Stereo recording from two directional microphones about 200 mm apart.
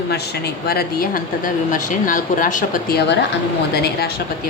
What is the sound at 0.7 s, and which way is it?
A woman's voice, 50° left (ahead or behind).